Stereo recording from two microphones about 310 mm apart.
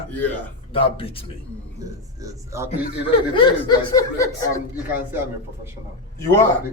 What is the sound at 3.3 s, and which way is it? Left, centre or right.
A man's voice, centre.